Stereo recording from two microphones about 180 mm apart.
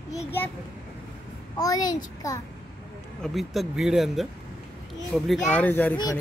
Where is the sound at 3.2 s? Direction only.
Centre (ahead or behind).